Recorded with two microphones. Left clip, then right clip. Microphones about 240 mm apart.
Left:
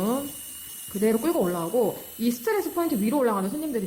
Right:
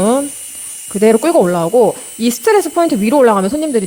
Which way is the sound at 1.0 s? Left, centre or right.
Right.